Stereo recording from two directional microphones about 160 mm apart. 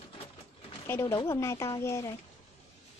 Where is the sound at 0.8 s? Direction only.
15° left (ahead or behind).